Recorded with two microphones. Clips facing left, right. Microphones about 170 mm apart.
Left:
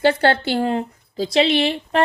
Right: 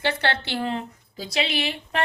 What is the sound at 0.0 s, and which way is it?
A woman's voice, 45° left (ahead or behind).